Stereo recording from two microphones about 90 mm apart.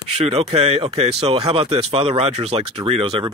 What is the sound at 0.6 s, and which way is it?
Speech, 90° right.